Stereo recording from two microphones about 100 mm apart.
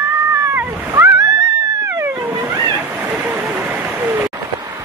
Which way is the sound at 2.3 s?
35° right (ahead or behind).